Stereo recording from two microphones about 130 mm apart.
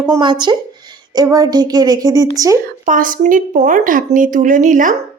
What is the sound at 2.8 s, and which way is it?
A woman's voice, 90° right.